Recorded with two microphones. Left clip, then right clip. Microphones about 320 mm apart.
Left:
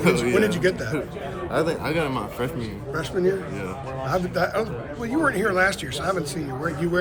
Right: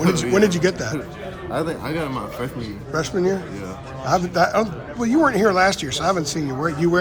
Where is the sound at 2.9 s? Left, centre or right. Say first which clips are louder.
Right 2 dB; centre.